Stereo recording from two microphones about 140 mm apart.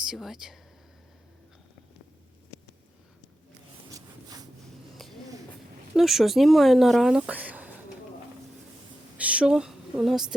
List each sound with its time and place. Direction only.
0.1 s speech: 5° right (ahead or behind)
3.9 s a sound: 25° right (ahead or behind)
6.0 s speech: centre (ahead or behind)
9.1 s a woman's voice: 10° right (ahead or behind)